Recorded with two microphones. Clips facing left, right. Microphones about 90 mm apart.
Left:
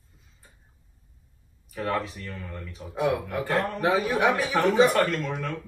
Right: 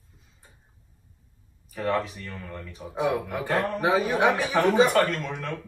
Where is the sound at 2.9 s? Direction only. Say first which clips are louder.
Even; 20° right (ahead or behind).